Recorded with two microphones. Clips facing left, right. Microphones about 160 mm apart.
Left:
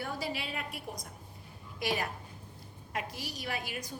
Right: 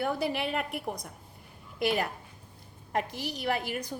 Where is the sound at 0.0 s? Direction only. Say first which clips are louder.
Right 7 dB; 60° right (ahead or behind).